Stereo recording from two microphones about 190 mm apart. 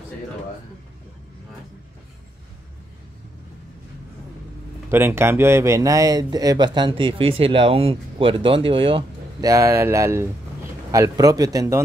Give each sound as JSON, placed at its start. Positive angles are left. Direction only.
{"t": 4.9, "sound": "speech", "side_deg": -10}